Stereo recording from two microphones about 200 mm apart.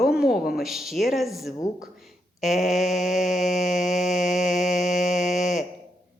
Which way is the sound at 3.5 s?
35° left (ahead or behind).